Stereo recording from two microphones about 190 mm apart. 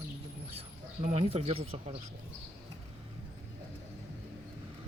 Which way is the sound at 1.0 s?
30° right (ahead or behind).